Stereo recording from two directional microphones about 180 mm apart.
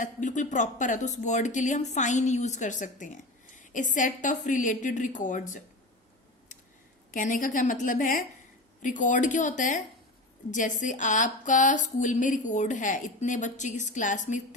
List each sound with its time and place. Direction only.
0.0 s speech: 45° left (ahead or behind)
7.1 s speech: 45° left (ahead or behind)